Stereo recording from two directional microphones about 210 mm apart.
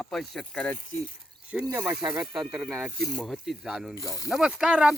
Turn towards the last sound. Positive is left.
turn(degrees=-5)  # may be behind; listen again after turning